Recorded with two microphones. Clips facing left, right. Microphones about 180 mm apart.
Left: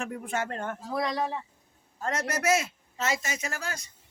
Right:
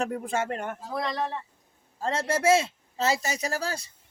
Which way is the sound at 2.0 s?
30° right (ahead or behind).